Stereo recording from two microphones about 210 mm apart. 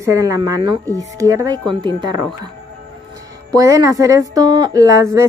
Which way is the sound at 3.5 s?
15° right (ahead or behind).